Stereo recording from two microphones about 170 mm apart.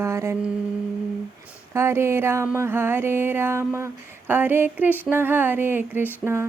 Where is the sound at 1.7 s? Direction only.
15° right (ahead or behind).